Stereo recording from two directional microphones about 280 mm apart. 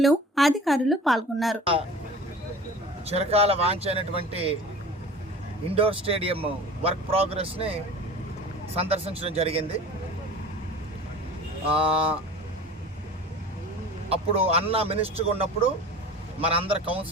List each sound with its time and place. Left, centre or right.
0.0 s speech: centre
3.1 s speech: right
5.6 s speech: centre
11.7 s speech: centre
14.1 s speech: right